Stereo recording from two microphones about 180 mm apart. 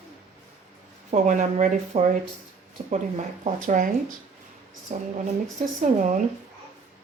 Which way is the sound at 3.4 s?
45° right (ahead or behind).